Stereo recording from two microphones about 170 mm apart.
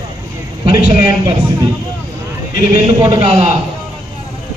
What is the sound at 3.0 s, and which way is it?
Speech, 25° right (ahead or behind).